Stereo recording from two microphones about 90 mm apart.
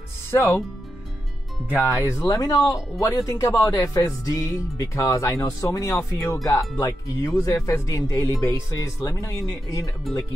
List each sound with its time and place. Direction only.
0.3 s speech: 25° left (ahead or behind)
1.9 s speech: 35° left (ahead or behind)
6.4 s speech: 35° left (ahead or behind)